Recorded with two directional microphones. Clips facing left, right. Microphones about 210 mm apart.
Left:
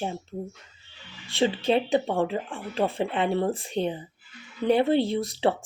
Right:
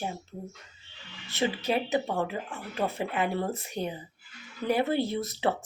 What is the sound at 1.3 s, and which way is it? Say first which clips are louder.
A woman's voice: left 5 dB; 25° left (ahead or behind).